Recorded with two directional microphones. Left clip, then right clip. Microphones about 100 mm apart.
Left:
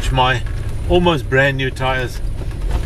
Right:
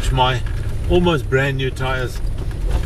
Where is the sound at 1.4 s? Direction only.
25° left (ahead or behind).